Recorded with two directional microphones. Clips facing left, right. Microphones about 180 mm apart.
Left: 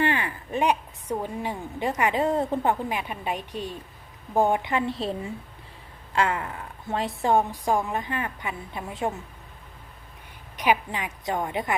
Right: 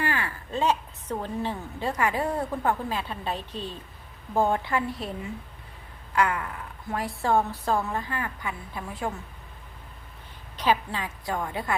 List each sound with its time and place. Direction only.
0.0 s a woman's voice: 20° left (ahead or behind)
10.6 s a woman's voice: 15° left (ahead or behind)